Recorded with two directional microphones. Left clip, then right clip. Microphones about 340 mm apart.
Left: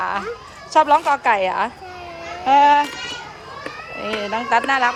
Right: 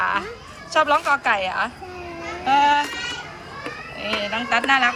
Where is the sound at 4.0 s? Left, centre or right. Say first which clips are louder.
Left 1 dB; centre.